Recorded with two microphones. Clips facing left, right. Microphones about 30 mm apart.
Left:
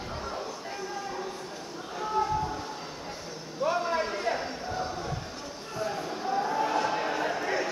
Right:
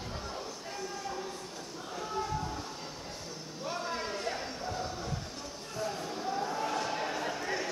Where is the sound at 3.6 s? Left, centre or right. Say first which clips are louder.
Left 9 dB; centre.